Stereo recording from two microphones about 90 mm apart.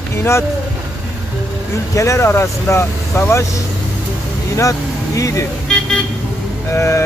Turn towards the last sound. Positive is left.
turn(degrees=30)  # may be behind; listen again after turning